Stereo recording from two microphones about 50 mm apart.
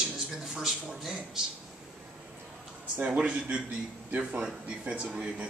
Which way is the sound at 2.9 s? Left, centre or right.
Right.